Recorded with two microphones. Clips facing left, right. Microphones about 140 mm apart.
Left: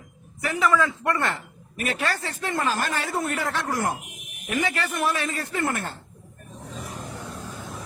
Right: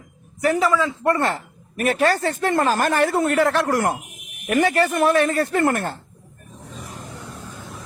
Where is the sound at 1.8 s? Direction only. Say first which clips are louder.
Right 9 dB; 45° right (ahead or behind); by 3.9 s 70° right (ahead or behind).